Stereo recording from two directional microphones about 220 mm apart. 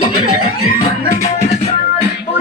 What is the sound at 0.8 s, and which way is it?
Music, 30° left (ahead or behind).